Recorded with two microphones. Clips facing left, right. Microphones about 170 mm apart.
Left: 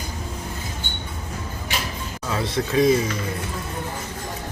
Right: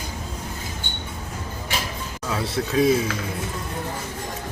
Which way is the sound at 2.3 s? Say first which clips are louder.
Left 1 dB; centre (ahead or behind).